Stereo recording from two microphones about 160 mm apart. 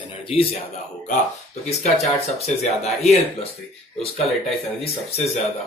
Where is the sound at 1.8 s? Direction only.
40° left (ahead or behind).